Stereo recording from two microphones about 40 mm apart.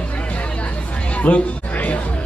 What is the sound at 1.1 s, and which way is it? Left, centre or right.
Music, left.